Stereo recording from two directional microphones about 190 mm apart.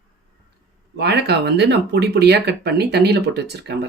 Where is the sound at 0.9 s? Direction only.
60° right (ahead or behind).